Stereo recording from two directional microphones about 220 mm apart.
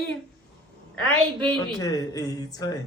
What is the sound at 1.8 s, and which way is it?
Speech, 15° left (ahead or behind).